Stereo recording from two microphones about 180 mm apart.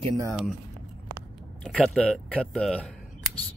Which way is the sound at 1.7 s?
5° left (ahead or behind).